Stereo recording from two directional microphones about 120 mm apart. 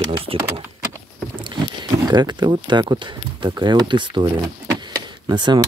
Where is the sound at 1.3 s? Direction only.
40° right (ahead or behind).